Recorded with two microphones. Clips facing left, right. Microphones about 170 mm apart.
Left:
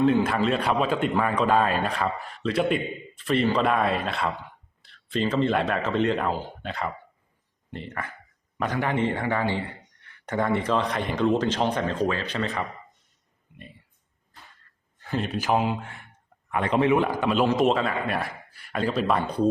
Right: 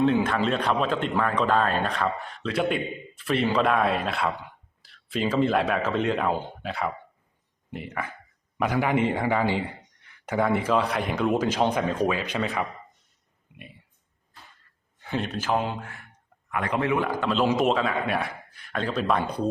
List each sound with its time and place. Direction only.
0.2 s a man's voice: 5° left (ahead or behind)
15.0 s speech: centre (ahead or behind)
15.8 s a man's voice: 25° left (ahead or behind)
17.4 s speech: centre (ahead or behind)